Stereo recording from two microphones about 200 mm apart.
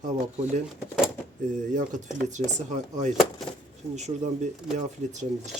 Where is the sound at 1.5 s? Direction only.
40° right (ahead or behind).